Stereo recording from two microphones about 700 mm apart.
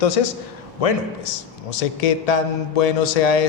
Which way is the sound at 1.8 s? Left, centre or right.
Left.